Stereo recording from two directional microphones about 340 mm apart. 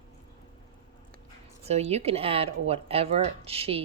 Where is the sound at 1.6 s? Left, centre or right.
Centre.